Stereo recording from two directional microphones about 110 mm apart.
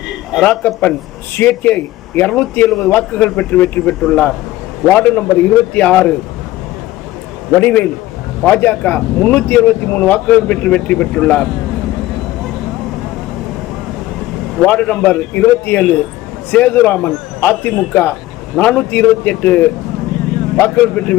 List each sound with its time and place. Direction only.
0.4 s speech: 15° left (ahead or behind)
7.5 s speech: 15° left (ahead or behind)
14.6 s speech: 15° left (ahead or behind)